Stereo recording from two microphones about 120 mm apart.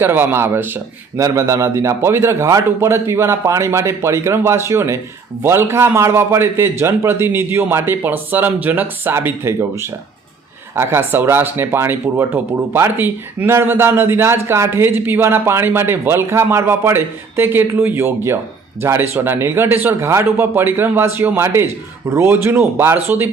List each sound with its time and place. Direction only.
0.0 s speech: 20° right (ahead or behind)